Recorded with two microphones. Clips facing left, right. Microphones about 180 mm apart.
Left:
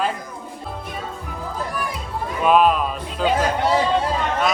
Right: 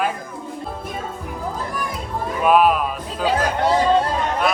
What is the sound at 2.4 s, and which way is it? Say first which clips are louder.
Speech: even; 5° right (ahead or behind).